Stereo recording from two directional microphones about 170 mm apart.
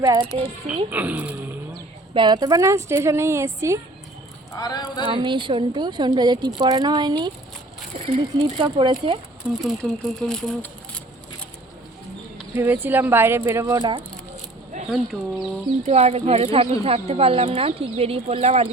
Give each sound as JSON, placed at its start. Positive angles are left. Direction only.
{"t": 0.9, "sound": "a woman's voice", "side_deg": -10}
{"t": 2.1, "sound": "a woman's voice", "side_deg": -25}
{"t": 4.5, "sound": "speech", "side_deg": 20}
{"t": 5.0, "sound": "a woman's voice", "side_deg": -30}
{"t": 9.4, "sound": "speech", "side_deg": 0}
{"t": 12.5, "sound": "a woman's voice", "side_deg": -10}
{"t": 14.8, "sound": "speech", "side_deg": 0}
{"t": 15.8, "sound": "speech", "side_deg": -40}